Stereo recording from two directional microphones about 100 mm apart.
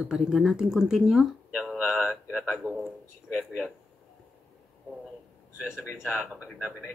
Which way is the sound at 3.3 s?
5° left (ahead or behind).